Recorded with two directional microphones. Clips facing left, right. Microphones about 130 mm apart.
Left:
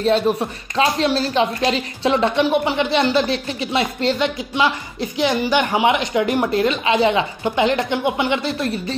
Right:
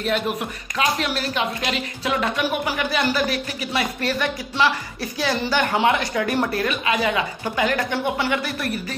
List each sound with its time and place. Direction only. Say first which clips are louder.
0.0 s speech: left 6 dB; 30° left (ahead or behind)